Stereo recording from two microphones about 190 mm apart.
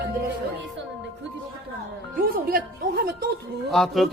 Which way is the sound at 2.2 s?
50° right (ahead or behind).